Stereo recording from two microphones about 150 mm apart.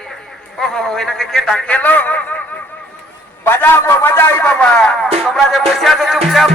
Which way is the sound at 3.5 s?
15° left (ahead or behind).